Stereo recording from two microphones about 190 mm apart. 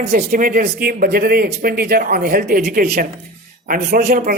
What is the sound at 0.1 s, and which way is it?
Speech, 45° right (ahead or behind).